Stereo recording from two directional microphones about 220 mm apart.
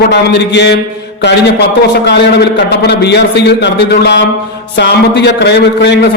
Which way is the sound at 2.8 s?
50° left (ahead or behind).